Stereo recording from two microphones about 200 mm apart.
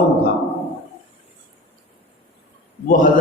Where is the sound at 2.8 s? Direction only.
40° left (ahead or behind).